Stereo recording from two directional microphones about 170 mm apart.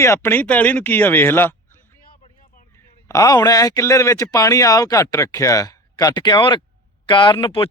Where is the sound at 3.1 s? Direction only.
20° left (ahead or behind).